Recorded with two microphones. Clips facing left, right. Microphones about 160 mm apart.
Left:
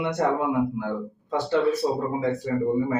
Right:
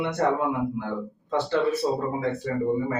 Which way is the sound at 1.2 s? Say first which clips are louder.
Left 1 dB; 10° left (ahead or behind).